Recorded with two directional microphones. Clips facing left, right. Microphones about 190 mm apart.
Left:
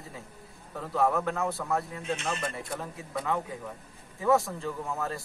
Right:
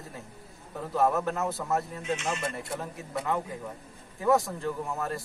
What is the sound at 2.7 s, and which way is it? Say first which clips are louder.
A man's voice: right 1 dB; 5° right (ahead or behind).